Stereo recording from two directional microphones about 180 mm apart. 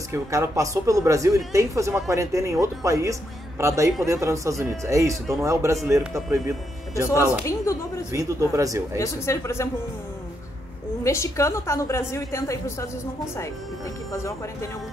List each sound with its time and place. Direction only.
0.1 s speech: 15° right (ahead or behind)
7.4 s a woman's voice: 15° left (ahead or behind)
8.1 s speech: 15° right (ahead or behind)
8.9 s a woman's voice: 15° left (ahead or behind)
11.1 s a woman's voice: 15° left (ahead or behind)
14.1 s a woman's voice: 15° left (ahead or behind)